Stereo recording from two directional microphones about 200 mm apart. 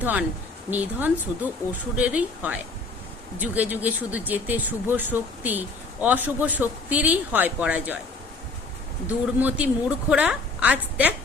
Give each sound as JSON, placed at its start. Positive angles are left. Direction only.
{"t": 0.0, "sound": "speech", "side_deg": -10}
{"t": 9.0, "sound": "speech", "side_deg": -10}